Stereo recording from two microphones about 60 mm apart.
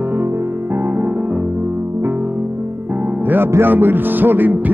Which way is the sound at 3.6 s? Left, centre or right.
Right.